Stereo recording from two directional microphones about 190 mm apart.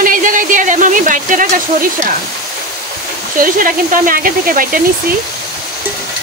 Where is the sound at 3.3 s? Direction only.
45° right (ahead or behind).